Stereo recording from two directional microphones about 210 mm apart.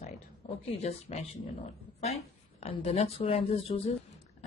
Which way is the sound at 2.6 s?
25° left (ahead or behind).